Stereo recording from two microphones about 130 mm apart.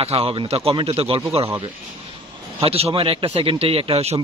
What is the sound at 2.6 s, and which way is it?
Speech, 50° right (ahead or behind).